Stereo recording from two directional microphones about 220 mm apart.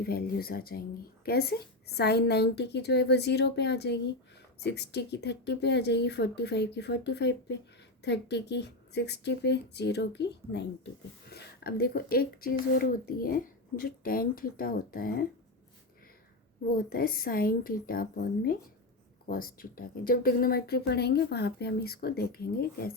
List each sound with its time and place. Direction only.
0.0 s a woman's voice: 45° left (ahead or behind)
16.6 s a woman's voice: 40° left (ahead or behind)